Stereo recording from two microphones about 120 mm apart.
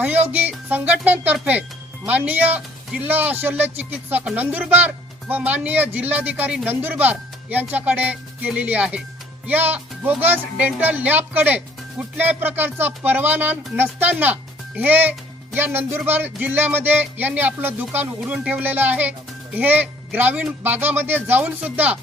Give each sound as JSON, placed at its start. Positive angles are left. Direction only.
{"t": 0.0, "sound": "speech", "side_deg": -15}